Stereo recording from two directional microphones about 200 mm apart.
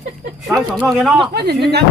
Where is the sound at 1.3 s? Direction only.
55° right (ahead or behind).